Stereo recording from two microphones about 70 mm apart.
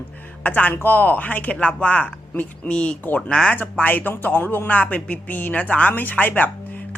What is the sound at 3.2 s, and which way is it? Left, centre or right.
Speech, centre.